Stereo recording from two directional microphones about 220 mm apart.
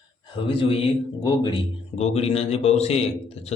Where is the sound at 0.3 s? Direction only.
25° left (ahead or behind).